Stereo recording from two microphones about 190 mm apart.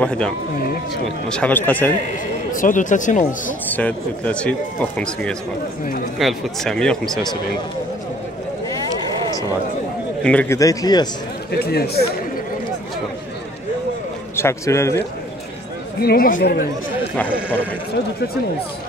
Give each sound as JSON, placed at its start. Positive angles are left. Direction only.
{"t": 1.3, "sound": "speech", "side_deg": 5}
{"t": 2.5, "sound": "speech", "side_deg": 45}
{"t": 3.7, "sound": "speech", "side_deg": 5}
{"t": 10.2, "sound": "speech", "side_deg": 5}
{"t": 10.6, "sound": "a man's voice", "side_deg": 20}
{"t": 11.5, "sound": "speech", "side_deg": 55}
{"t": 14.3, "sound": "a man's voice", "side_deg": 15}
{"t": 16.0, "sound": "speech", "side_deg": 50}